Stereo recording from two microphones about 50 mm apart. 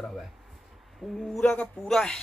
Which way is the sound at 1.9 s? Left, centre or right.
Centre.